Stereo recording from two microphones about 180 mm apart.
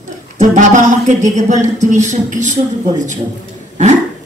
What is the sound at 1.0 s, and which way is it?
A woman's voice, 45° right (ahead or behind).